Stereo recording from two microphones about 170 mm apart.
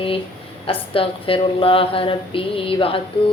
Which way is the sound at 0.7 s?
30° left (ahead or behind).